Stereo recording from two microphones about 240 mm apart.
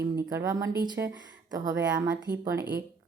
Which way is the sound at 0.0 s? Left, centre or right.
Centre.